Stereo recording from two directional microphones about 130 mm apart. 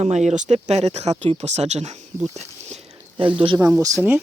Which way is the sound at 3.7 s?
25° right (ahead or behind).